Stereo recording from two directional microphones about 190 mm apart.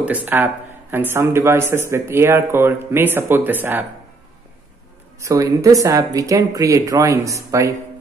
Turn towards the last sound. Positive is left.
turn(degrees=-15)  # may be behind; listen again after turning